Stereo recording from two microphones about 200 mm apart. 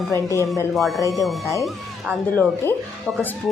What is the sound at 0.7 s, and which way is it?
Speech, centre (ahead or behind).